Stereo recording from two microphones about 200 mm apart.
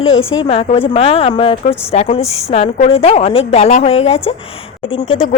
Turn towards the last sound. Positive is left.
turn(degrees=30)  # may be behind; listen again after turning